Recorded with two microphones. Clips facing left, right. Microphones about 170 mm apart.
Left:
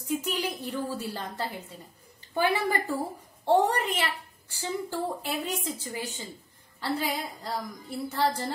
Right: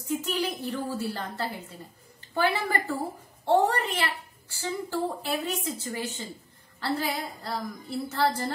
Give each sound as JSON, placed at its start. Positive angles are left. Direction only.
{"t": 0.0, "sound": "a woman's voice", "side_deg": 15}